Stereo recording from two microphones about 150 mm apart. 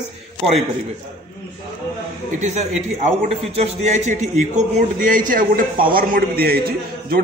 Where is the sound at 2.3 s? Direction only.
50° right (ahead or behind).